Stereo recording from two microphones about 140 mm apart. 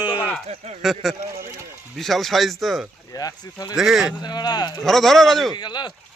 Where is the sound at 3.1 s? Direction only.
25° left (ahead or behind).